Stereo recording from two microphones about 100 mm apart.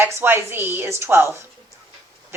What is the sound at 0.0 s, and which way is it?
A woman's voice, 25° right (ahead or behind).